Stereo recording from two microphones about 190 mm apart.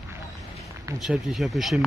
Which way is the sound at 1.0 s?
Centre (ahead or behind).